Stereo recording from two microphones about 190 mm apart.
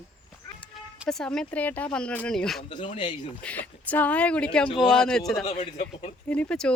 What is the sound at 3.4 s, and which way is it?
Speech, 10° left (ahead or behind).